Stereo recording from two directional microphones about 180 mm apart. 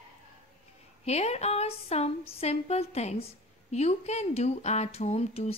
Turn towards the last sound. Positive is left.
turn(degrees=35)  # may be behind; listen again after turning